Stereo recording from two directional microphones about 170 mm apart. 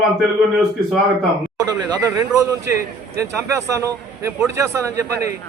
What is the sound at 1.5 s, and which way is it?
A man's voice, 20° right (ahead or behind).